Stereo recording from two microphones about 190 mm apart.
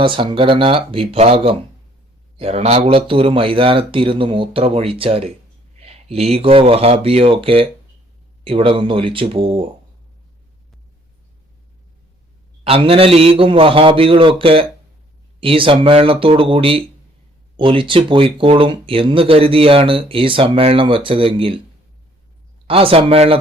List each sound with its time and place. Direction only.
0.0 s speech: 25° right (ahead or behind)
12.6 s speech: 30° right (ahead or behind)
22.6 s speech: 30° right (ahead or behind)